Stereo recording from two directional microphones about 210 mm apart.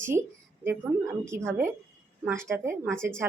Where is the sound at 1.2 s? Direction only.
10° right (ahead or behind).